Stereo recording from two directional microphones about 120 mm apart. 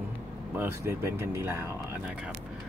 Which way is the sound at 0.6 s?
20° right (ahead or behind).